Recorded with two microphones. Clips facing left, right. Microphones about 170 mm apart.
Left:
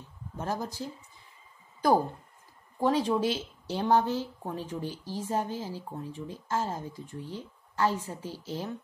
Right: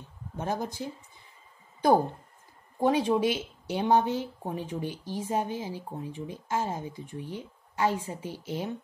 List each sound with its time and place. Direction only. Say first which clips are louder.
0.4 s speech: right 2 dB; 20° right (ahead or behind)
2.8 s speech: right 2 dB; 20° right (ahead or behind)